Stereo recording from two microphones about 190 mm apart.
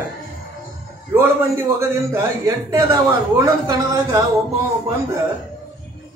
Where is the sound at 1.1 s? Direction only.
15° right (ahead or behind).